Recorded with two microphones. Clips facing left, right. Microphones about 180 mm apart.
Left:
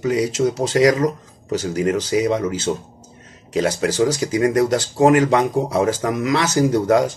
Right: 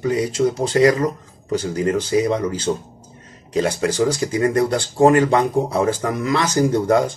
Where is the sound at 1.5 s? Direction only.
10° left (ahead or behind).